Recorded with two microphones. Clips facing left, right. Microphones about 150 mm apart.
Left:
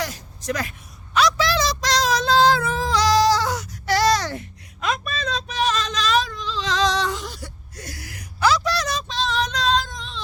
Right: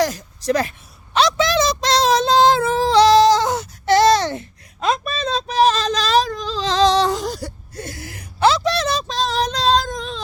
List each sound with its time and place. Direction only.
0.0 s a sound: 35° right (ahead or behind)
1.1 s child singing: 25° right (ahead or behind)
9.0 s child singing: 40° right (ahead or behind)
9.9 s child singing: 45° right (ahead or behind)